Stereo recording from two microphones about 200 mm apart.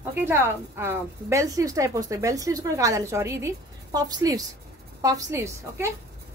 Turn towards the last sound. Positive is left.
turn(degrees=-15)  # may be behind; listen again after turning